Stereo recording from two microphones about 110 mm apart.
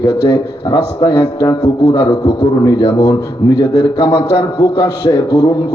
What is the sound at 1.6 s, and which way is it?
Speech, 55° left (ahead or behind).